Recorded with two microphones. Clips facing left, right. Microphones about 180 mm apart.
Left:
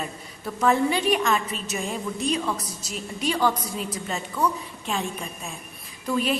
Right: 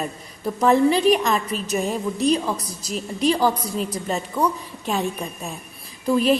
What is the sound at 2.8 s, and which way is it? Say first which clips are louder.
A woman's voice: right 7 dB; 35° right (ahead or behind).